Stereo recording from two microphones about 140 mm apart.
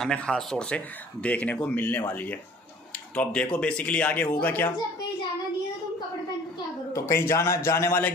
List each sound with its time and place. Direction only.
0.0 s speech: 5° left (ahead or behind)
6.9 s a man's voice: 20° left (ahead or behind)